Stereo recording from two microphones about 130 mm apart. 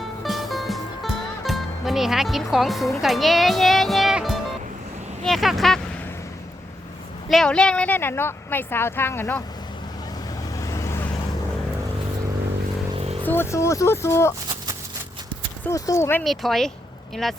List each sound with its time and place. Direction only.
0.3 s music: centre (ahead or behind)
3.0 s speech: centre (ahead or behind)
7.3 s a woman's voice: 5° left (ahead or behind)
10.5 s vehicle: 25° left (ahead or behind)
13.2 s speech: 15° left (ahead or behind)
15.7 s speech: 25° left (ahead or behind)
16.2 s speech: centre (ahead or behind)